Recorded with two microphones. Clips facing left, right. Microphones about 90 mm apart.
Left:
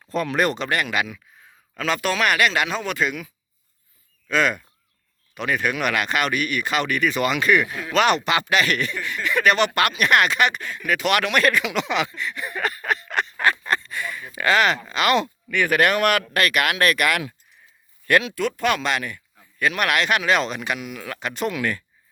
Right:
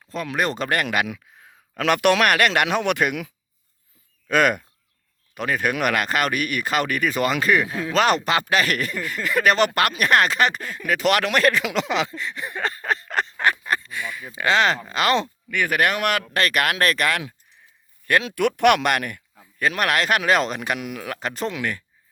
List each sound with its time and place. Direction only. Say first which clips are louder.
0.1 s speech: left 4 dB; 5° right (ahead or behind)
0.5 s speech: right 1 dB; 45° right (ahead or behind)
1.8 s speech: right 4 dB; 70° right (ahead or behind)
2.3 s speech: right 2 dB; 55° right (ahead or behind)
4.3 s speech: right 2 dB; 50° right (ahead or behind)
5.3 s speech: even; 40° right (ahead or behind)
13.3 s speech: left 1 dB; 15° right (ahead or behind)
14.3 s speech: even; 25° right (ahead or behind)
15.4 s speech: left 2 dB; 20° right (ahead or behind)
18.3 s speech: right 5 dB; 70° right (ahead or behind)
19.5 s speech: even; 35° right (ahead or behind)
21.4 s speech: left 3 dB; 20° right (ahead or behind)